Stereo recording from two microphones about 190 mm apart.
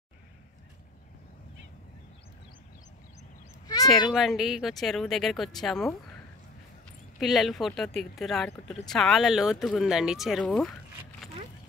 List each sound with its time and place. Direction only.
3.6 s a sound: 20° left (ahead or behind)
4.1 s speech: centre (ahead or behind)
7.2 s speech: centre (ahead or behind)